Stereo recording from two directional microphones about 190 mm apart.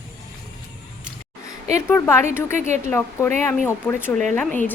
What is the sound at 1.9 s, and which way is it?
Speech, 15° left (ahead or behind).